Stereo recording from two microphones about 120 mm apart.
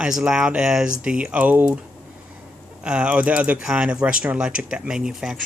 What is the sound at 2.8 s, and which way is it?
Speech, 5° right (ahead or behind).